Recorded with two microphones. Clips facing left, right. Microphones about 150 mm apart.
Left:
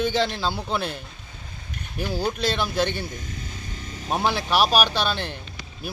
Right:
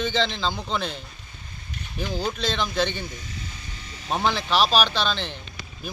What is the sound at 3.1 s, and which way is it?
Ratchet, 50° left (ahead or behind).